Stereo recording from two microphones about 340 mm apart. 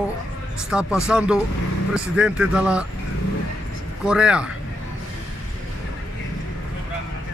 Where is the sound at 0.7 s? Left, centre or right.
Centre.